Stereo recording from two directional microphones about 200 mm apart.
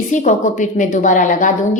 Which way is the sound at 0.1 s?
40° left (ahead or behind).